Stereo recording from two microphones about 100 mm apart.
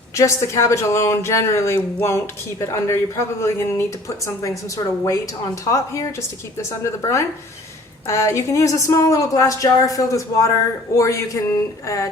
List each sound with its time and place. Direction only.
0.2 s speech: 30° left (ahead or behind)
5.0 s speech: 35° left (ahead or behind)